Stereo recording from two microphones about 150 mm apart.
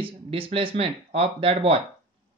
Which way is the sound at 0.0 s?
35° right (ahead or behind).